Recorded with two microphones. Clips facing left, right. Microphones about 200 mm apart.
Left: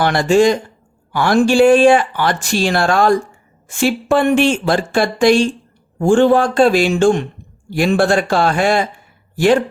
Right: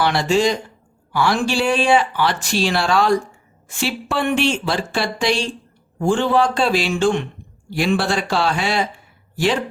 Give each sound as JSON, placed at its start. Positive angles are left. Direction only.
{"t": 0.0, "sound": "speech", "side_deg": 50}